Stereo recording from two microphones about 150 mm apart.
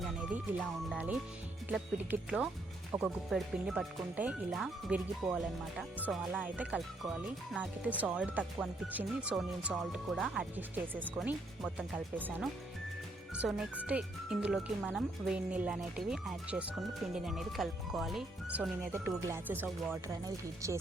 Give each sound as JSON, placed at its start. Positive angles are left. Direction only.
{"t": 0.9, "sound": "speech", "side_deg": -5}
{"t": 3.2, "sound": "speech", "side_deg": 0}
{"t": 18.9, "sound": "speech", "side_deg": -15}